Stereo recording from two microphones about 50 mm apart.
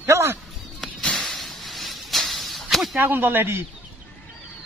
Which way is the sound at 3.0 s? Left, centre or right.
Right.